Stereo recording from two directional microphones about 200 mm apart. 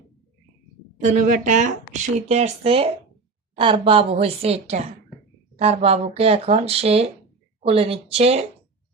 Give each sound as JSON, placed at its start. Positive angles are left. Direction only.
{"t": 1.0, "sound": "a woman's voice", "side_deg": -40}